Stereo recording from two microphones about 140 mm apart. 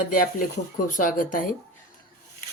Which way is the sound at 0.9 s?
70° left (ahead or behind).